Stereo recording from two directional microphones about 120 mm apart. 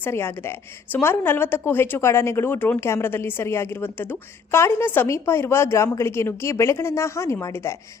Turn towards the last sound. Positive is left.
turn(degrees=25)  # may be behind; listen again after turning